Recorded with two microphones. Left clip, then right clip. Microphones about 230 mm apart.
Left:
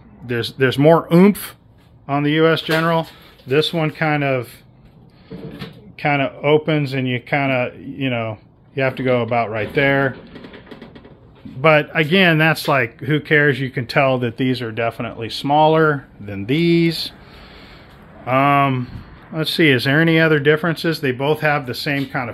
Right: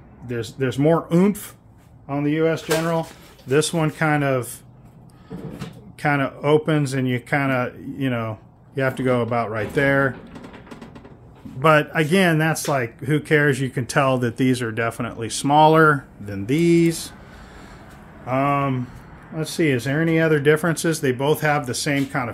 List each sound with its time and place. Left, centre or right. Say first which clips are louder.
0.3 s speech: left 7 dB; left
3.7 s speech: left 2 dB; centre
6.0 s speech: left 3 dB; centre
11.6 s speech: left 3 dB; centre
16.3 s speech: left 1 dB; centre
18.2 s speech: left 6 dB; centre